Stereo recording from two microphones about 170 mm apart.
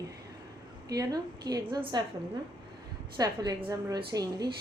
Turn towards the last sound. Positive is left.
turn(degrees=-20)  # may be behind; listen again after turning